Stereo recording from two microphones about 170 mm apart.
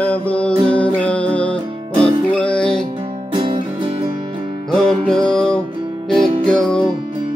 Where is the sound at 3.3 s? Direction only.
30° right (ahead or behind).